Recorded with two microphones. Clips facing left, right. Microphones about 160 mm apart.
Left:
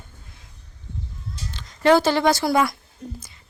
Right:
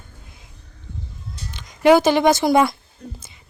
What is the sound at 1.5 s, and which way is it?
Speech, 15° right (ahead or behind).